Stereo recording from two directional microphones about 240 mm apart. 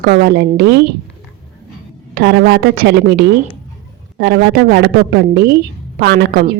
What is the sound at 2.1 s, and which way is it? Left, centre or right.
A woman's voice, right.